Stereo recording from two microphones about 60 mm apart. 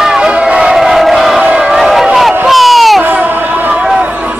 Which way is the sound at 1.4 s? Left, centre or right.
Centre.